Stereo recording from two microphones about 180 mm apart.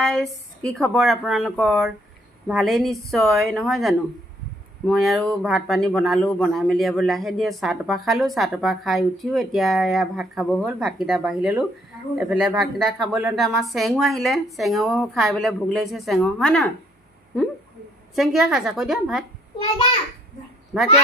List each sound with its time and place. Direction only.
0.0 s speech: centre (ahead or behind)
18.1 s speech: centre (ahead or behind)
20.7 s speech: centre (ahead or behind)